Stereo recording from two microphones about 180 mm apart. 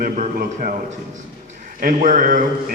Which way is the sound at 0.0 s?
50° right (ahead or behind).